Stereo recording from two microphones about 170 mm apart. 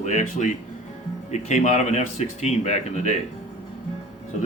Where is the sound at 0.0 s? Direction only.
45° left (ahead or behind).